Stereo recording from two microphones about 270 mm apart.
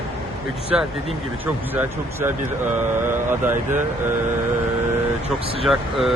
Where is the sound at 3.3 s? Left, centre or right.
Centre.